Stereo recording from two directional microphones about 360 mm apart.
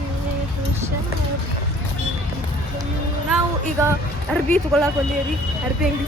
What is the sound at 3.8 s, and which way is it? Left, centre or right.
Speech, centre.